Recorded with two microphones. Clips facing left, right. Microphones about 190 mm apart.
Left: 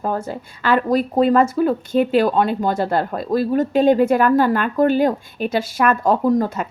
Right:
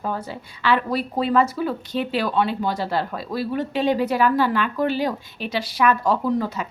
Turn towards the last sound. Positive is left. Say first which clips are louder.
# left 5 dB
turn(degrees=45)  # may be behind; listen again after turning